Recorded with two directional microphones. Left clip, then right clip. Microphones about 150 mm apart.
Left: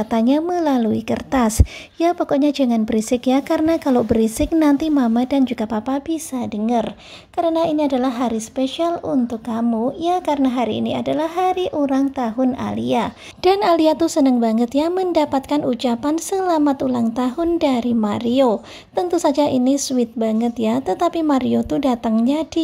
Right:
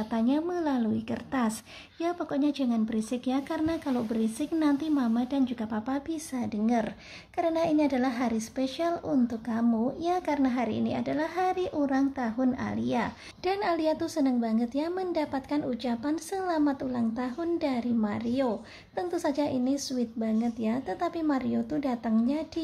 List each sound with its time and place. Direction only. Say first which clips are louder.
0.1 s speech: left 10 dB; 40° left (ahead or behind)
13.4 s a woman's voice: left 13 dB; 45° left (ahead or behind)